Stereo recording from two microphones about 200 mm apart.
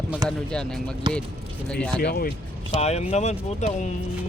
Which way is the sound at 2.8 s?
35° left (ahead or behind).